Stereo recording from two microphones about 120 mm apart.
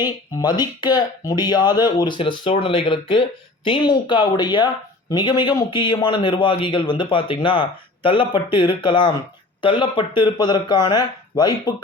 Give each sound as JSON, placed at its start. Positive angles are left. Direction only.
{"t": 0.0, "sound": "speech", "side_deg": 35}
{"t": 2.1, "sound": "a man's voice", "side_deg": 45}